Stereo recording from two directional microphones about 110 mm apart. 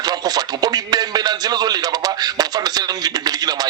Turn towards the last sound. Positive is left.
turn(degrees=-35)  # may be behind; listen again after turning